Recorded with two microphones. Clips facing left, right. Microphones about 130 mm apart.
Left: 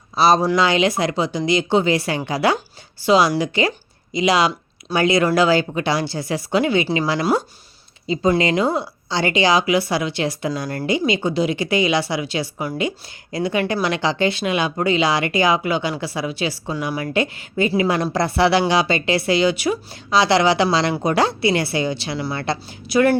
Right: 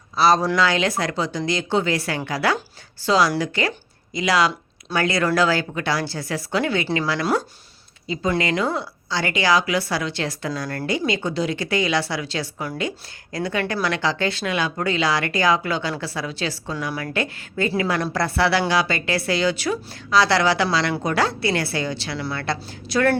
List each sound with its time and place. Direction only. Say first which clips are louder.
0.2 s speech: left 2 dB; 20° left (ahead or behind)
22.9 s speech: left 5 dB; 10° left (ahead or behind)